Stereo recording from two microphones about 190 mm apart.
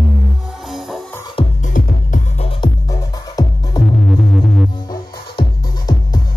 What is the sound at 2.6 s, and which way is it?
Music, 20° left (ahead or behind).